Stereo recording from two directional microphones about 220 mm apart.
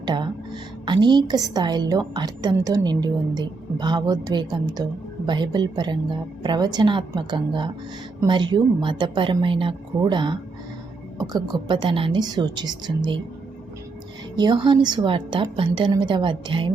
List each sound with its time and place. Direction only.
0.0 s a woman's voice: 20° right (ahead or behind)
14.3 s a woman's voice: 20° right (ahead or behind)